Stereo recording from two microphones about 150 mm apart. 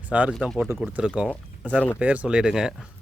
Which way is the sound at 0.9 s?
5° right (ahead or behind).